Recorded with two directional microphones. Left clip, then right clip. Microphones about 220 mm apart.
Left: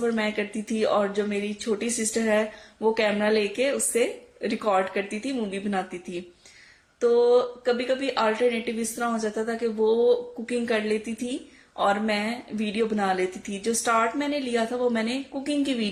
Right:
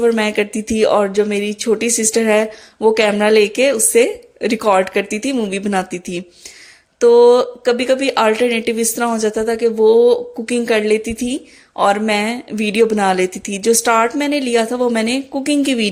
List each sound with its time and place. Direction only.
0.0 s speech: 45° right (ahead or behind)